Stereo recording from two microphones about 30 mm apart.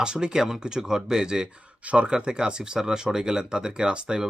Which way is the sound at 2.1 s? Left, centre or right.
Right.